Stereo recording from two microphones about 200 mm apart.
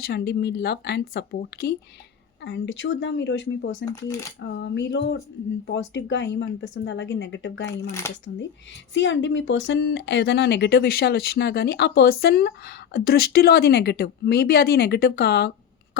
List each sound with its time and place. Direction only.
0.0 s speech: 50° left (ahead or behind)
2.4 s speech: 65° left (ahead or behind)
8.1 s speech: 15° left (ahead or behind)
8.9 s speech: 65° left (ahead or behind)